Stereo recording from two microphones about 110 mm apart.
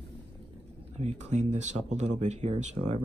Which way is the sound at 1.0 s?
85° right.